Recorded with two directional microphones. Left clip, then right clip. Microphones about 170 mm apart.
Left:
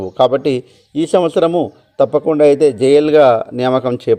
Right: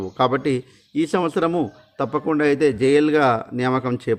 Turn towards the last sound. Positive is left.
turn(degrees=-30)  # may be behind; listen again after turning